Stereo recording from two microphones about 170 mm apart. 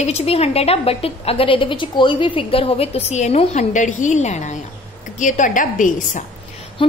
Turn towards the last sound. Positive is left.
turn(degrees=30)  # may be behind; listen again after turning